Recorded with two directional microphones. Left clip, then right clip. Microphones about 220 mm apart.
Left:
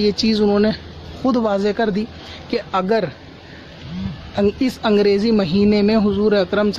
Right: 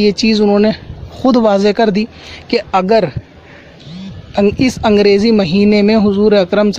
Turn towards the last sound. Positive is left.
turn(degrees=-35)  # may be behind; listen again after turning